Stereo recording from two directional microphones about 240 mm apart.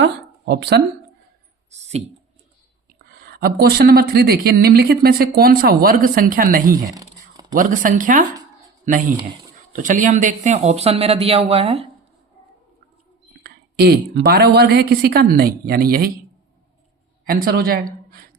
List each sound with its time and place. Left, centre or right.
0.0 s speech: right
1.7 s clicking: right
3.2 s a woman's voice: right
6.8 s a sound: centre
7.5 s a woman's voice: right
13.4 s a woman's voice: right
17.2 s a woman's voice: right